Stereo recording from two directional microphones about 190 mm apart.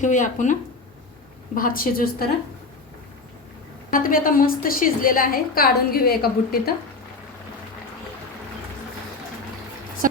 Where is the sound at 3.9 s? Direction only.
50° left (ahead or behind).